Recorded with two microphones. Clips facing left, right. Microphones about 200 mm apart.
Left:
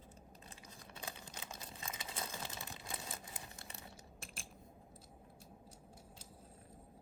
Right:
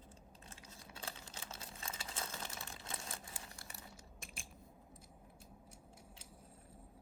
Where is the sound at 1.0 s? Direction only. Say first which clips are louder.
Left 1 dB; 15° left (ahead or behind).